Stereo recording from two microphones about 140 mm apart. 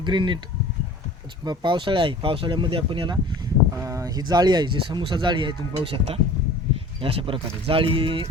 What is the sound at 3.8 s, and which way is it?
Speech, 25° right (ahead or behind).